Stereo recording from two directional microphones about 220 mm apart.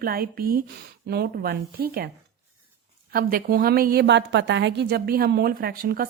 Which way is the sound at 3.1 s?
40° right (ahead or behind).